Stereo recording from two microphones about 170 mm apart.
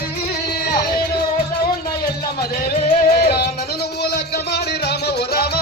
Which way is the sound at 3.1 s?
70° left (ahead or behind).